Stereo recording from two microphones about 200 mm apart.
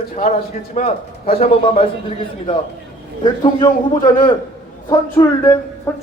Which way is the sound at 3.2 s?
20° left (ahead or behind).